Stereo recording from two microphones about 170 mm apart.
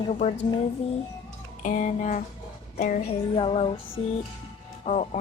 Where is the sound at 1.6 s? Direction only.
50° left (ahead or behind).